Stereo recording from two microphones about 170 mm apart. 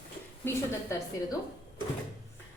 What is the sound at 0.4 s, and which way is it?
Speech, 15° left (ahead or behind).